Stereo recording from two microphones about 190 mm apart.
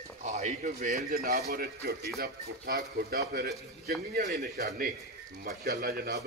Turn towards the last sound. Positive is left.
turn(degrees=-55)  # may be behind; listen again after turning